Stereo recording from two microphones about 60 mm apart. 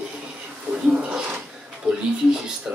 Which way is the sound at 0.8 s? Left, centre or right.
Centre.